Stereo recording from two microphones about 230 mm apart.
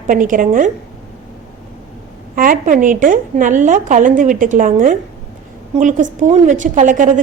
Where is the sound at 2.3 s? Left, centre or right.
Right.